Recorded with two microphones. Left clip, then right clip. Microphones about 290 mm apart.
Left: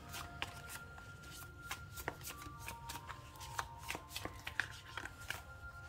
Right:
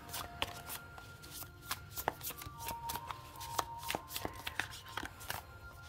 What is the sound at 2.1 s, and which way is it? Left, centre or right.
Shuffling cards, right.